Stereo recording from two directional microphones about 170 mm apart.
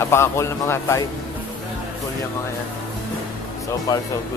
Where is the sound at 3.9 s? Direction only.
20° left (ahead or behind).